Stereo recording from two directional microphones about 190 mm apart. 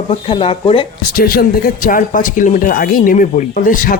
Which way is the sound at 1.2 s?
50° left (ahead or behind).